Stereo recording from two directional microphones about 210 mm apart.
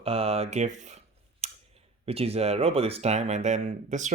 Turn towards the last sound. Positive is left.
turn(degrees=-35)  # may be behind; listen again after turning